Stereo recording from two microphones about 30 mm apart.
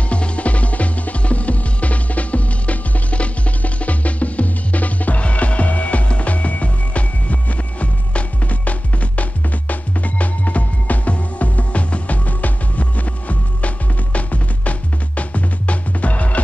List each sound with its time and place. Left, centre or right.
0.1 s music: left